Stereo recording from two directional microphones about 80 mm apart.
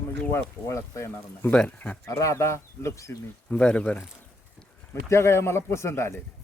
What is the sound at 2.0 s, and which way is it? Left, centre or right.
Speech, left.